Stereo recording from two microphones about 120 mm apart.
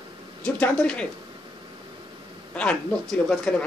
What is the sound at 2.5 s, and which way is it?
Speech, 5° left (ahead or behind).